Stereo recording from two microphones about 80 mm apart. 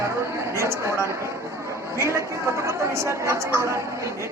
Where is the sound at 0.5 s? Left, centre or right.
Right.